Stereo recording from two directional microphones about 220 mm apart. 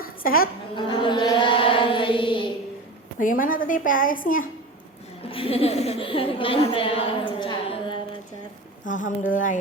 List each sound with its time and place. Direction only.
0.0 s a sound: 40° left (ahead or behind)
0.8 s chant: 20° left (ahead or behind)
3.2 s a woman's voice: 40° left (ahead or behind)
5.2 s a woman's voice: 25° left (ahead or behind)
8.9 s a woman's voice: 35° left (ahead or behind)